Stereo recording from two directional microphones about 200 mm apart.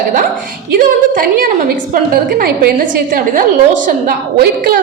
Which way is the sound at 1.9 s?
45° right (ahead or behind).